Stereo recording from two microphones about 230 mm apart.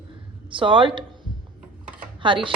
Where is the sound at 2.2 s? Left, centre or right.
Right.